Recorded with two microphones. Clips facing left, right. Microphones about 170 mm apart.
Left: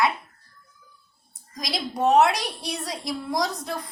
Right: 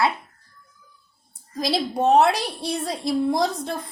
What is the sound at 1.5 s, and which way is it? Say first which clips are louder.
Speech: right 5 dB; 30° right (ahead or behind).